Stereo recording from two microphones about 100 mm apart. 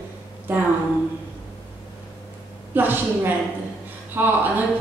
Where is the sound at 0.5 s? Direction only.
25° right (ahead or behind).